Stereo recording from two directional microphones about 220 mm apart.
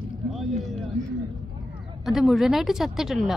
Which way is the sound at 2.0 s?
Centre (ahead or behind).